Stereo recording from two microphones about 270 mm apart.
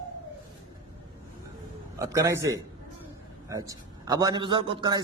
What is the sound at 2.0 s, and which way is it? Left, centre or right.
A man's voice, centre.